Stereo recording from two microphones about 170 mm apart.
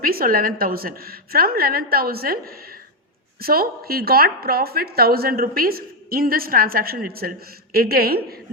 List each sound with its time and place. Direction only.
0.0 s a woman's voice: 60° right (ahead or behind)